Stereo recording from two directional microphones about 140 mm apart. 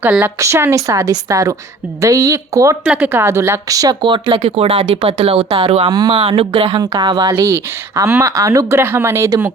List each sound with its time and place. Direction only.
0.0 s speech: 15° right (ahead or behind)
2.8 s speech: 5° right (ahead or behind)
3.1 s speech: 15° right (ahead or behind)